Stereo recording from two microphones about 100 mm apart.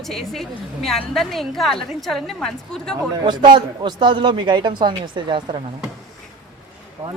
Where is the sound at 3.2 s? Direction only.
50° right (ahead or behind).